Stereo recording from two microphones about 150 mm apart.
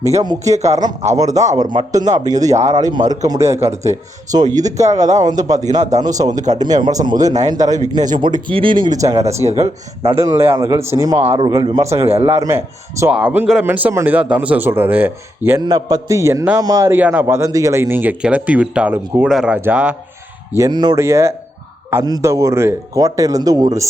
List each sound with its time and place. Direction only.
0.2 s speech: 25° right (ahead or behind)
9.4 s speech: 45° right (ahead or behind)
10.0 s speech: 20° right (ahead or behind)
11.2 s speech: 45° right (ahead or behind)
11.4 s speech: 30° right (ahead or behind)
12.0 s speech: 40° right (ahead or behind)
12.3 s a man's voice: 20° right (ahead or behind)
15.6 s a man's voice: 25° right (ahead or behind); by 20.0 s 10° right (ahead or behind)
20.7 s speech: 30° right (ahead or behind)
21.0 s speech: 20° right (ahead or behind)